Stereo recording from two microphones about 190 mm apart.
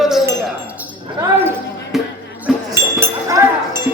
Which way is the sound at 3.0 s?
15° right (ahead or behind).